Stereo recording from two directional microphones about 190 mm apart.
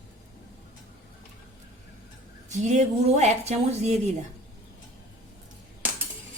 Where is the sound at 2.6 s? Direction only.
35° right (ahead or behind).